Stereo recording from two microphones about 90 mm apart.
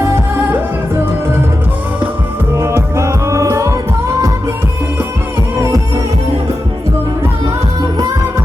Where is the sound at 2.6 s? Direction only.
30° right (ahead or behind).